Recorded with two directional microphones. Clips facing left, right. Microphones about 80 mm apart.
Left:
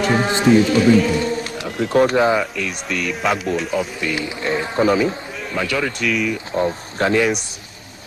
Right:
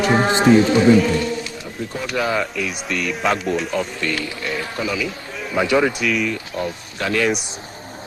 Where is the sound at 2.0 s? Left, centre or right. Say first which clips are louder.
Left 5 dB; left.